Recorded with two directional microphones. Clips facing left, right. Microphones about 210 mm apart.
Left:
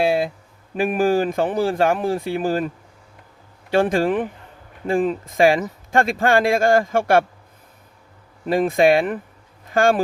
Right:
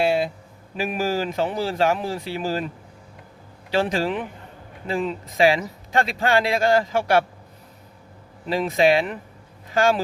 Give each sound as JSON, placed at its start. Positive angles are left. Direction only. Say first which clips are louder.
{"t": 0.8, "sound": "speech", "louder": "left 6 dB", "side_deg": 50}
{"t": 3.7, "sound": "speech", "louder": "left 5 dB", "side_deg": 50}
{"t": 8.4, "sound": "speech", "louder": "left 3 dB", "side_deg": 50}